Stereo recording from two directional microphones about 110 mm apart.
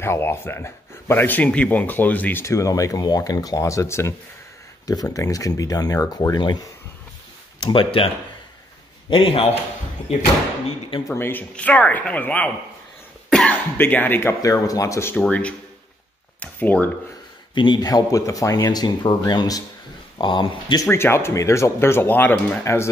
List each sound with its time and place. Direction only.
0.0 s speech: 20° left (ahead or behind)
2.4 s speech: 30° left (ahead or behind)
7.6 s speech: 50° left (ahead or behind)
9.1 s a man's voice: 55° left (ahead or behind)
11.1 s speech: 20° left (ahead or behind)
13.5 s speech: 15° left (ahead or behind)
14.4 s speech: 30° left (ahead or behind)
15.2 s speech: 10° left (ahead or behind)
17.6 s speech: 40° left (ahead or behind)
20.9 s speech: 20° left (ahead or behind)